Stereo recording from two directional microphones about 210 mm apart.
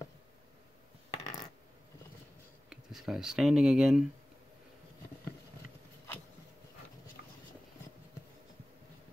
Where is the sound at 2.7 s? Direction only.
Centre (ahead or behind).